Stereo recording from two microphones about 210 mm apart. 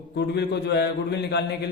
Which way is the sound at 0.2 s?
55° left (ahead or behind).